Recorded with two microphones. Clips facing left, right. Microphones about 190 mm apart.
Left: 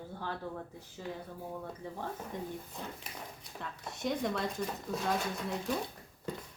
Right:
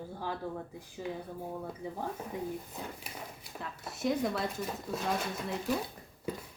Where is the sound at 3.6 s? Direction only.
5° right (ahead or behind).